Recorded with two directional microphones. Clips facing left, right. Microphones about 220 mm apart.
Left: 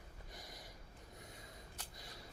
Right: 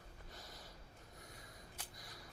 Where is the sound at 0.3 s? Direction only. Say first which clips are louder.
Left 1 dB; 15° left (ahead or behind).